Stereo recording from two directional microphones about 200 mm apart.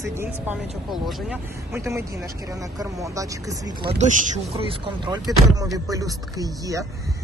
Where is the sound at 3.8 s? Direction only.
35° right (ahead or behind).